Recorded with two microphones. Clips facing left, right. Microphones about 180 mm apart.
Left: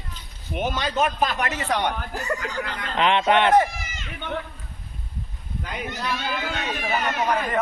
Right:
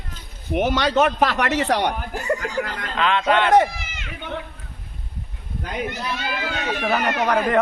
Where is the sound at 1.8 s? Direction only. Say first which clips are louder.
Right 3 dB; 35° right (ahead or behind).